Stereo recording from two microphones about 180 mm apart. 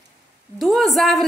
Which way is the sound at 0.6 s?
Centre (ahead or behind).